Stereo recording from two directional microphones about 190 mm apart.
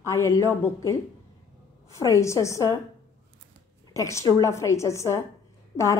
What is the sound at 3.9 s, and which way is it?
A woman's voice, 15° left (ahead or behind).